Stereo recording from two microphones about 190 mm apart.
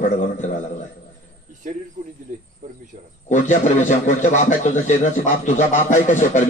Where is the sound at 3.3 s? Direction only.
40° left (ahead or behind).